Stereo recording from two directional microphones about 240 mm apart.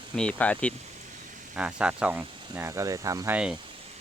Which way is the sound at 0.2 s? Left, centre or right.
Centre.